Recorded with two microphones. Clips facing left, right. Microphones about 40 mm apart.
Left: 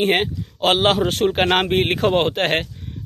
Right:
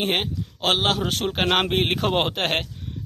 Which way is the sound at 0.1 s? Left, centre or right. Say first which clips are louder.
Left 5 dB; centre.